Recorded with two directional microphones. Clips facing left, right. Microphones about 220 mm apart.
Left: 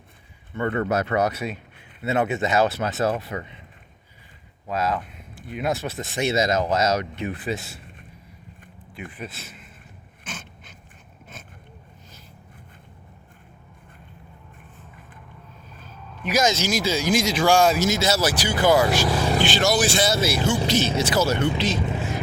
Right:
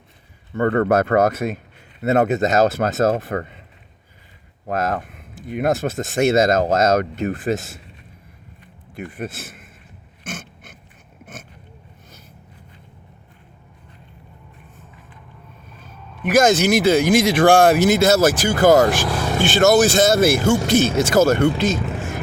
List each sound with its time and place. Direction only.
0.5 s speech: 50° right (ahead or behind)
4.6 s speech: 50° right (ahead or behind)
9.1 s speech: 45° right (ahead or behind)
16.2 s speech: 50° right (ahead or behind)
19.0 s vehicle: centre (ahead or behind)
19.5 s speech: 45° right (ahead or behind)
21.9 s vehicle: 45° right (ahead or behind)